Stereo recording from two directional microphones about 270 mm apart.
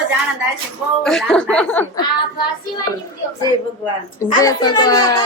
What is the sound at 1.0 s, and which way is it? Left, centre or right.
A woman's voice, centre.